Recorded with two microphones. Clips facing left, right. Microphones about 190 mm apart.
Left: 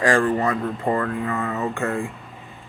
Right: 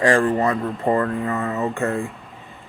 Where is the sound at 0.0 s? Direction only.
30° right (ahead or behind).